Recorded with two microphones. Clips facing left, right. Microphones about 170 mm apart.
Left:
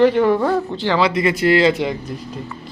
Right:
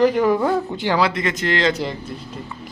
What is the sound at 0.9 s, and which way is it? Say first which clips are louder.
Speech: left 4 dB; centre (ahead or behind).